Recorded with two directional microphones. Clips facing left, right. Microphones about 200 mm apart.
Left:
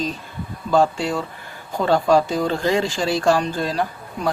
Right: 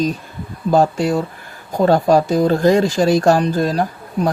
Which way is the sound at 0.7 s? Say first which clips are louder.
Right 4 dB; 40° right (ahead or behind).